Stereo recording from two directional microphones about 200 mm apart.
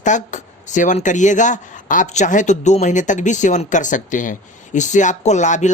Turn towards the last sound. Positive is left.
turn(degrees=35)  # may be behind; listen again after turning